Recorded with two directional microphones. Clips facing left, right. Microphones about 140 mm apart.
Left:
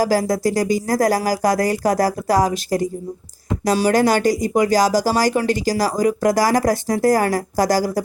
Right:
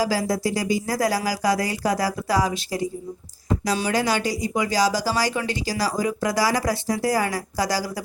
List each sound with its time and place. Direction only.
0.0 s speech: 45° left (ahead or behind)